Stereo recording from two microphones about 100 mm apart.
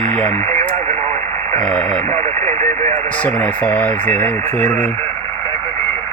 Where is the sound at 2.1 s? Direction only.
25° left (ahead or behind).